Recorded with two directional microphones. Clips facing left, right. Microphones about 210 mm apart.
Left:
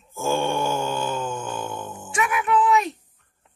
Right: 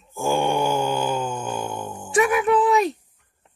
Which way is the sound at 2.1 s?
35° right (ahead or behind).